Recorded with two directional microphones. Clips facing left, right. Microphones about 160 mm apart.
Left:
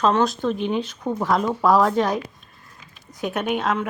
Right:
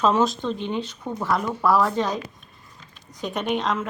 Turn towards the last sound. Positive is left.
turn(degrees=5)  # may be behind; listen again after turning